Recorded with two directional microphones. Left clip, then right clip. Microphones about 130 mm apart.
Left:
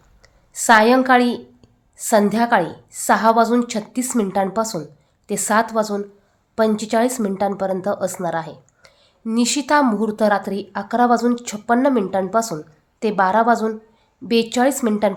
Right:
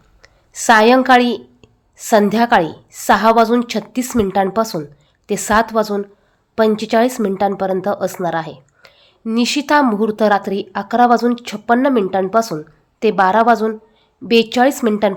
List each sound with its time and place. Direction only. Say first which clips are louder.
0.2 s a woman's voice: right 1 dB; 30° right (ahead or behind)